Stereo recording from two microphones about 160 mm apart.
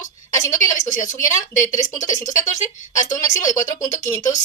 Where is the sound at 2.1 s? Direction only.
50° left (ahead or behind).